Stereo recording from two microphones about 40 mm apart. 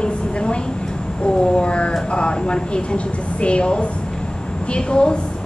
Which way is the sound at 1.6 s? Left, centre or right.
Left.